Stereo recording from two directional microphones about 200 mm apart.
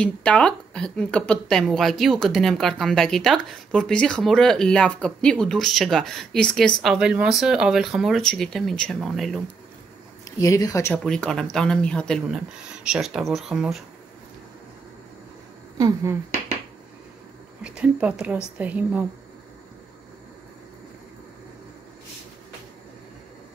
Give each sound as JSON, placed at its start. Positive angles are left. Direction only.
{"t": 0.0, "sound": "speech", "side_deg": 5}
{"t": 10.2, "sound": "speech", "side_deg": 15}
{"t": 11.1, "sound": "speech", "side_deg": 5}
{"t": 15.8, "sound": "speech", "side_deg": -15}
{"t": 17.7, "sound": "speech", "side_deg": -5}